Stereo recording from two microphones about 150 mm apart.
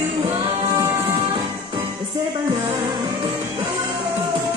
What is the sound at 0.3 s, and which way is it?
Music, 30° right (ahead or behind).